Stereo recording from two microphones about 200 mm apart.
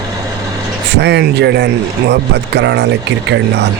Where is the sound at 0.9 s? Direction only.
55° right (ahead or behind).